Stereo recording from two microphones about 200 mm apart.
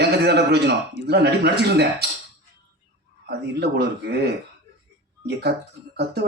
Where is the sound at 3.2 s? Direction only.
55° right (ahead or behind).